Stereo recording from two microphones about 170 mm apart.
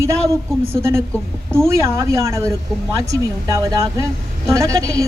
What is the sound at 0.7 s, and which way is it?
A woman's voice, 15° right (ahead or behind).